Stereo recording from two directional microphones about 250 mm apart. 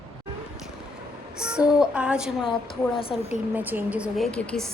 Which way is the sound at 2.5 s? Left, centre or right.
Left.